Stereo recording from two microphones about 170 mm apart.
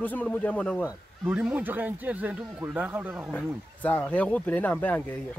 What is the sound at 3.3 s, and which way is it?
Speech, 10° left (ahead or behind).